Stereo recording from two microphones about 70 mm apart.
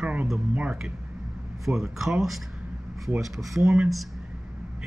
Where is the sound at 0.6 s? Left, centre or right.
Centre.